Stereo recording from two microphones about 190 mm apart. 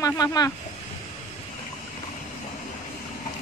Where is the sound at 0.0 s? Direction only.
20° left (ahead or behind).